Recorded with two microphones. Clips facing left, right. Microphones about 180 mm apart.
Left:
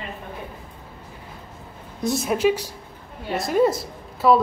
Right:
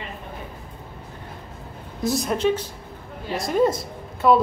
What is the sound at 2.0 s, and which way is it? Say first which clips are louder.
Speech: left 1 dB; centre (ahead or behind).